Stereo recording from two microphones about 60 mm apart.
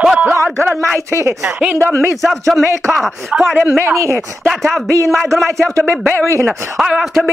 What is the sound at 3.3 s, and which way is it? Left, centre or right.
Speech, centre.